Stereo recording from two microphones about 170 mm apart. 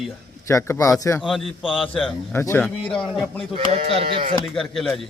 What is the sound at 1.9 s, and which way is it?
Speech, 10° left (ahead or behind).